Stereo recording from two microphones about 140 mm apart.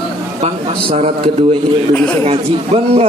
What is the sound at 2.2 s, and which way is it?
Speech, 45° right (ahead or behind).